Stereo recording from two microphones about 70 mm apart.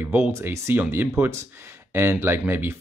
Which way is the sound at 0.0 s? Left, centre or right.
Right.